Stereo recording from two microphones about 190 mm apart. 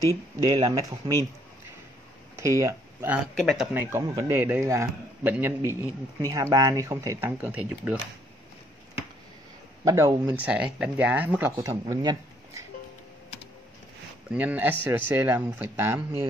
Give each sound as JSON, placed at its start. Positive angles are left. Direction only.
{"t": 0.4, "sound": "speech", "side_deg": -20}
{"t": 2.3, "sound": "a man's voice", "side_deg": -15}
{"t": 9.8, "sound": "a man's voice", "side_deg": -15}
{"t": 14.3, "sound": "a man's voice", "side_deg": -10}